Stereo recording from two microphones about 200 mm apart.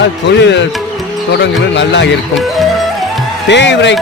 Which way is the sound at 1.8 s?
60° left (ahead or behind).